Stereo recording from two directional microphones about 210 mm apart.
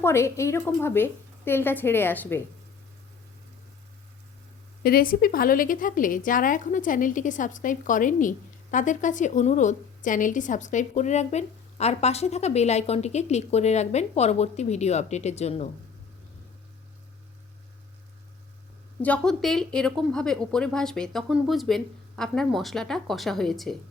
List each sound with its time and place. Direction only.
0.0 s a woman's voice: 10° left (ahead or behind)
4.8 s a woman's voice: 45° left (ahead or behind)
19.0 s speech: 5° left (ahead or behind)